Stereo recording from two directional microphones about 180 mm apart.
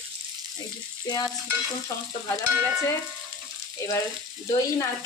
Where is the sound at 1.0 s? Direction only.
20° left (ahead or behind).